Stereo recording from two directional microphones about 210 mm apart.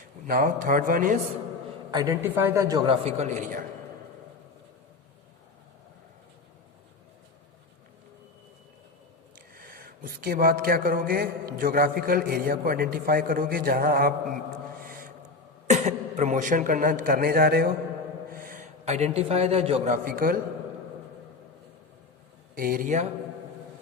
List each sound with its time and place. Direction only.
0.3 s speech: 40° right (ahead or behind)
1.9 s a man's voice: 15° right (ahead or behind); by 3.7 s 40° right (ahead or behind)
9.6 s a man's voice: 45° right (ahead or behind)
14.8 s a sound: 40° right (ahead or behind)
15.6 s a man's voice: 35° right (ahead or behind)
22.5 s speech: 45° right (ahead or behind)